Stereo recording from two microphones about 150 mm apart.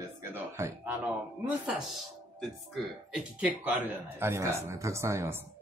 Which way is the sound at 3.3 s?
10° right (ahead or behind).